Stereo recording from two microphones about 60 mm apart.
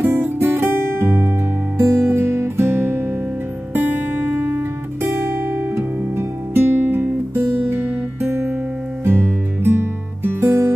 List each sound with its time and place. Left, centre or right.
0.0 s music: right
4.4 s music: right